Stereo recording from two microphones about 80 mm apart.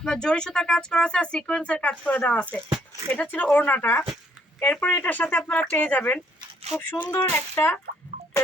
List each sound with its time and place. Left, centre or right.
0.0 s speech: centre; by 7.8 s left